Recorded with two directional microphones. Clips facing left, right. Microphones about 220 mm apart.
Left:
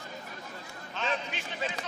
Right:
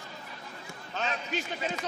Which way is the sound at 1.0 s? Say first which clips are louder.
Even; 40° right (ahead or behind).